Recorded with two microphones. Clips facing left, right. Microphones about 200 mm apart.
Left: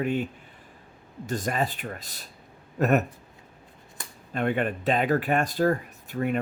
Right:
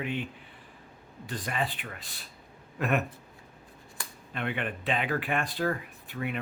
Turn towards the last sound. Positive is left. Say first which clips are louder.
# left 7 dB
turn(degrees=45)  # may be behind; listen again after turning